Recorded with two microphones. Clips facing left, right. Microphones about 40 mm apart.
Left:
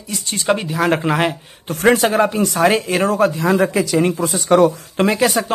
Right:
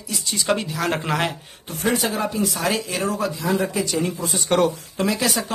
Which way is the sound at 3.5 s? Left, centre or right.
Left.